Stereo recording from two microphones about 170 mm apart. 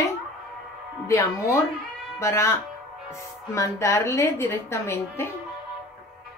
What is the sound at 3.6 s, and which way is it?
Speech, 15° left (ahead or behind).